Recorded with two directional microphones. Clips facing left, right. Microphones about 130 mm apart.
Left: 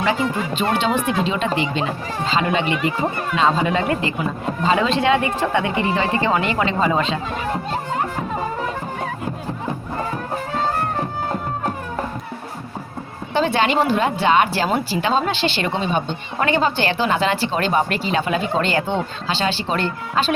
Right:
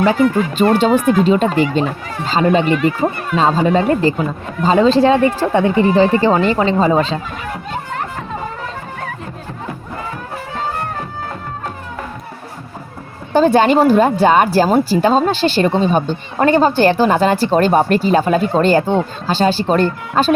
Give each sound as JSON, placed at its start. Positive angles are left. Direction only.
{"t": 0.5, "sound": "a man's voice", "side_deg": -40}
{"t": 13.3, "sound": "speech", "side_deg": -45}